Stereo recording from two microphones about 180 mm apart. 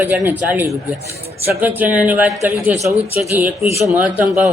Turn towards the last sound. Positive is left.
turn(degrees=-5)  # may be behind; listen again after turning